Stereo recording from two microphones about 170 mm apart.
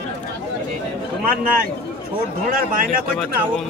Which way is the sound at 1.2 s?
60° right (ahead or behind).